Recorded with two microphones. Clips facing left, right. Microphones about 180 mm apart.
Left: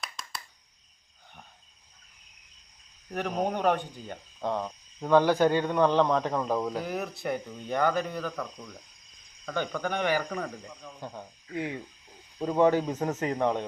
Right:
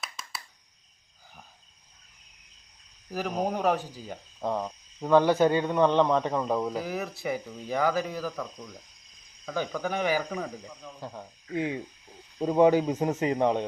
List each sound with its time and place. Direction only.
0.0 s a sound: 5° right (ahead or behind)
3.1 s speech: centre (ahead or behind)
11.5 s frog: 20° right (ahead or behind)
12.4 s speech: 15° right (ahead or behind)